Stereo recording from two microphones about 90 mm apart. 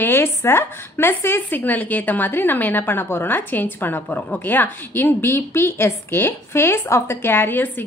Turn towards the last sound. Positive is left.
turn(degrees=20)  # may be behind; listen again after turning